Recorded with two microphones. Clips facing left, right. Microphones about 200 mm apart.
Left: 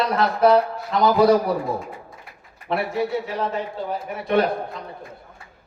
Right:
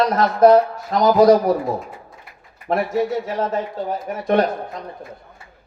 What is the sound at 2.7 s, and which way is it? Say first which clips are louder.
A man's voice: right 3 dB; 40° right (ahead or behind).